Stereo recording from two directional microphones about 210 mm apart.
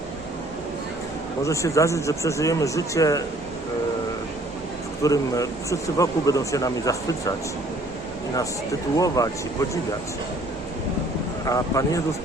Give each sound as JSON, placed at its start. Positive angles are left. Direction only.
{"t": 1.5, "sound": "a man's voice", "side_deg": 15}
{"t": 5.0, "sound": "a man's voice", "side_deg": 15}
{"t": 9.0, "sound": "a man's voice", "side_deg": 15}
{"t": 11.4, "sound": "a man's voice", "side_deg": 15}